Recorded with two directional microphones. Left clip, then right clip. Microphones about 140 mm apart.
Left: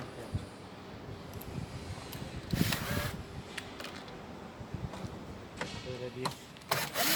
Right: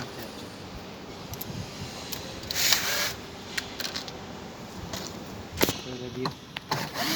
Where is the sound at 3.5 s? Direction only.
5° left (ahead or behind).